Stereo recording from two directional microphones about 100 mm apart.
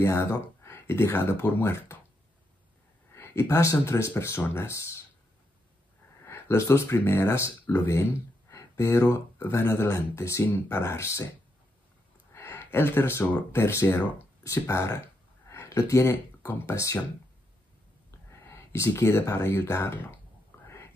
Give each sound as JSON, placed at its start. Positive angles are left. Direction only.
{"t": 0.0, "sound": "speech", "side_deg": 25}
{"t": 3.2, "sound": "speech", "side_deg": 25}
{"t": 6.2, "sound": "speech", "side_deg": 25}
{"t": 12.3, "sound": "a sound", "side_deg": 25}
{"t": 13.5, "sound": "speech", "side_deg": 25}
{"t": 18.4, "sound": "speech", "side_deg": 25}
{"t": 20.6, "sound": "a sound", "side_deg": 25}